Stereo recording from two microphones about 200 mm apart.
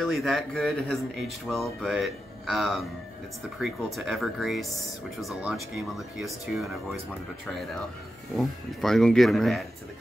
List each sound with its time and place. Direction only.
0.0 s speech: centre (ahead or behind)
8.4 s speech: centre (ahead or behind)